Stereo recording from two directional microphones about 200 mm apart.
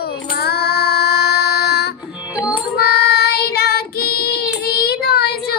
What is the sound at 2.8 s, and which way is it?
Child singing, 55° left (ahead or behind).